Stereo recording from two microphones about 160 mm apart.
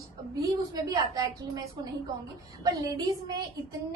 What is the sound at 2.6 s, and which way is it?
Speech, 20° right (ahead or behind).